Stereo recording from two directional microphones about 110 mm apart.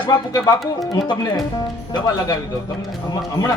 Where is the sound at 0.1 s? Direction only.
35° left (ahead or behind).